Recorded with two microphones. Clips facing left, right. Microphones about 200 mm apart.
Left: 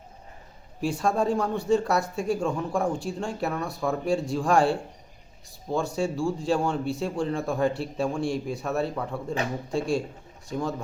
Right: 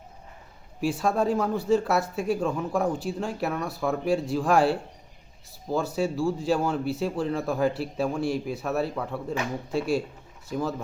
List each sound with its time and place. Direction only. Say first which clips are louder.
0.8 s speech: even; centre (ahead or behind)